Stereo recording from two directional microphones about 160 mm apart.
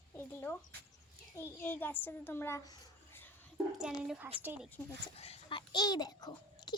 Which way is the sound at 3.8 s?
5° right (ahead or behind).